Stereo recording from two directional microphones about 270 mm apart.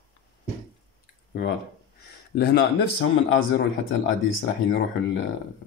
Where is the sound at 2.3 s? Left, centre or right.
Left.